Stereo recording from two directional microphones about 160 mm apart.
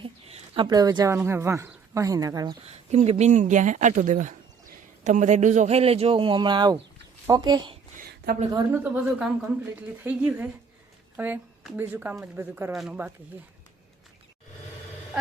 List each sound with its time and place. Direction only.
0.0 s speech: 30° right (ahead or behind)
2.6 s a man's voice: 40° right (ahead or behind)
7.9 s a sound: 70° right (ahead or behind)
8.5 s speech: 15° right (ahead or behind)
12.7 s speech: centre (ahead or behind)